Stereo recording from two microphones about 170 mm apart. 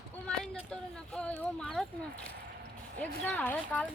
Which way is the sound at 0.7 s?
5° left (ahead or behind).